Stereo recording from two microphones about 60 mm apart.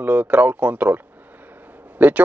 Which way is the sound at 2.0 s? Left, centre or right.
Right.